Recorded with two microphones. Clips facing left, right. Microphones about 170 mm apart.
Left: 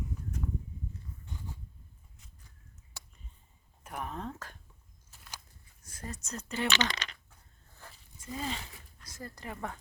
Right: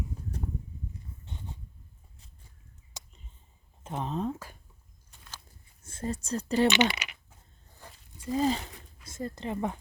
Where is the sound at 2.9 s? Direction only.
20° right (ahead or behind).